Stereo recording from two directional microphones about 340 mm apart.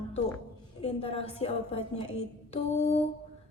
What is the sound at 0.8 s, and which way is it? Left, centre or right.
A woman's voice, centre.